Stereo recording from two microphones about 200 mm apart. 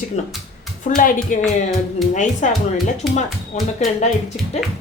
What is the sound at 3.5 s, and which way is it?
A woman's voice, 35° left (ahead or behind).